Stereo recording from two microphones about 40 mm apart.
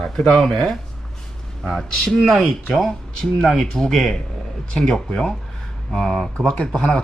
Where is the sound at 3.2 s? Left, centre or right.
Centre.